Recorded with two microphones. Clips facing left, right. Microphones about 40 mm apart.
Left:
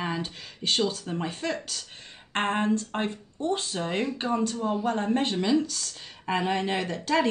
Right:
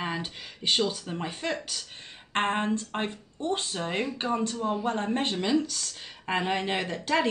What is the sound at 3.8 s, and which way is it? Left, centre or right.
Speech, centre.